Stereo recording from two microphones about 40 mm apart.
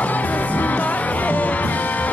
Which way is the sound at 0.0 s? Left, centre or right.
Left.